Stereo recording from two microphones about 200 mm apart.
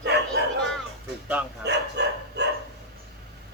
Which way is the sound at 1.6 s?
55° right (ahead or behind).